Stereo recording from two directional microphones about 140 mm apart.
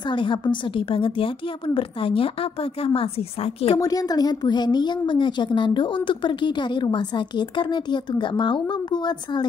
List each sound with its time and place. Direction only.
0.1 s a woman's voice: 35° left (ahead or behind)
3.7 s a woman's voice: 25° left (ahead or behind)